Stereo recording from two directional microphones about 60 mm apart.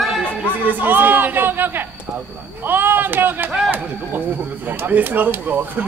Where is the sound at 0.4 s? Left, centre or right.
Right.